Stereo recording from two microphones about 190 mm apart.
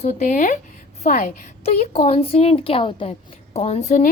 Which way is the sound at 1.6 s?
35° left (ahead or behind).